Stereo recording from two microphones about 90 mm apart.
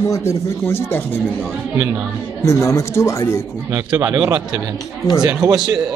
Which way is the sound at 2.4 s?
35° left (ahead or behind).